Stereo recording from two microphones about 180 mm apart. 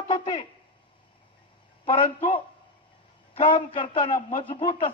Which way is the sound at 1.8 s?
30° left (ahead or behind).